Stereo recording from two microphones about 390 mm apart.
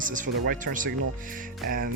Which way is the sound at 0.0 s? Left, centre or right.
Centre.